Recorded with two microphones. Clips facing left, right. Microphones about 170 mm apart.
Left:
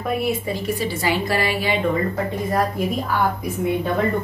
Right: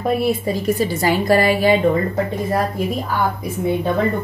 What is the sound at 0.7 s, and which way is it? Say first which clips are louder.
A woman's voice: right 4 dB; 45° right (ahead or behind).